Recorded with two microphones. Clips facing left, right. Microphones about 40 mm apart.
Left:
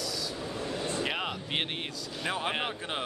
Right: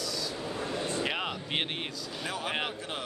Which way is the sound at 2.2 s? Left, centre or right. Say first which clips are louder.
Left 4 dB; left.